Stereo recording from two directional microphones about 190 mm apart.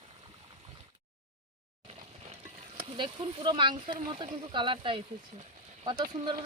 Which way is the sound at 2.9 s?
25° right (ahead or behind).